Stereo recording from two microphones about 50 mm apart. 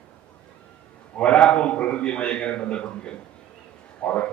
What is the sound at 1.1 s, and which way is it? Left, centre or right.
A man's voice, left.